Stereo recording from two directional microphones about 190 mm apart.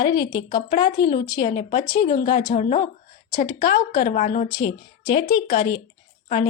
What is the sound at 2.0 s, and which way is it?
Speech, 50° left (ahead or behind).